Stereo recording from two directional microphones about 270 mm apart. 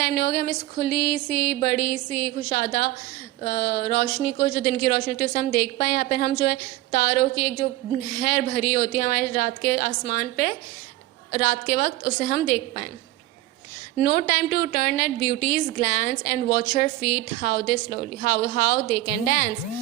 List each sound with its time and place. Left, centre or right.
0.0 s a woman's voice: left
14.0 s a woman's voice: left